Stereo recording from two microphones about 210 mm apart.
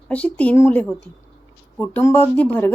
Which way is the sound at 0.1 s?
5° left (ahead or behind).